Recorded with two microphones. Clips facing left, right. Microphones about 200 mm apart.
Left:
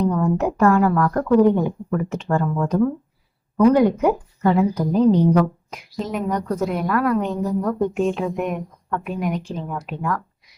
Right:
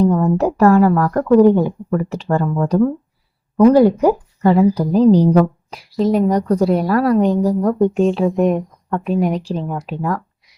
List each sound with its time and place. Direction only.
0.0 s a woman's voice: 35° right (ahead or behind)